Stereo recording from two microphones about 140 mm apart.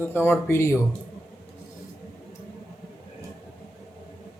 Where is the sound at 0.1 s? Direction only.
15° left (ahead or behind).